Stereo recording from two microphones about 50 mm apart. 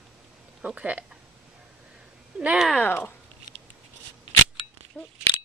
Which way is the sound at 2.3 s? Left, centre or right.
Centre.